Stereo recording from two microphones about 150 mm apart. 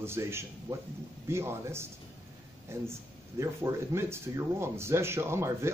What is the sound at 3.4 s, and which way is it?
A man's voice, 20° right (ahead or behind).